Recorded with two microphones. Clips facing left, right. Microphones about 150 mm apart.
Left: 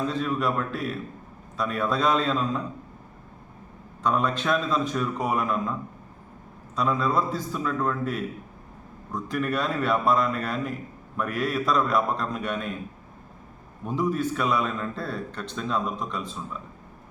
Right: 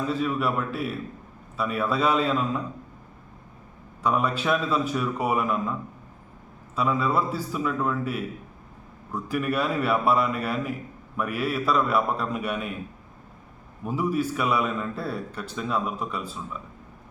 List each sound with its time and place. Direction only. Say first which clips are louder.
0.1 s a man's voice: right 1 dB; 5° right (ahead or behind)
4.0 s a man's voice: even; 5° right (ahead or behind)
6.7 s a man's voice: even; 5° right (ahead or behind)
13.8 s a man's voice: even; 10° right (ahead or behind)